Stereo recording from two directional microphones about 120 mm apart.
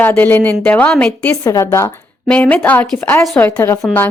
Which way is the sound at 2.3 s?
10° left (ahead or behind).